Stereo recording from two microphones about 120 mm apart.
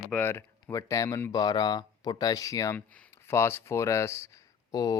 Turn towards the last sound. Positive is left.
turn(degrees=30)  # may be behind; listen again after turning